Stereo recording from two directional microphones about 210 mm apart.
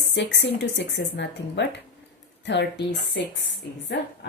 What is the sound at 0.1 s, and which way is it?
A woman's voice, 55° left (ahead or behind).